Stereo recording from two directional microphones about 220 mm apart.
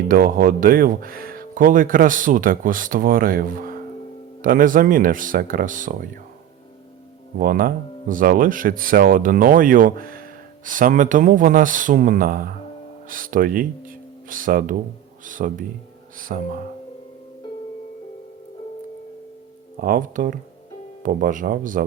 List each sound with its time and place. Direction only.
0.1 s speech: 40° right (ahead or behind)
7.3 s speech: 40° right (ahead or behind)
19.8 s speech: 40° right (ahead or behind)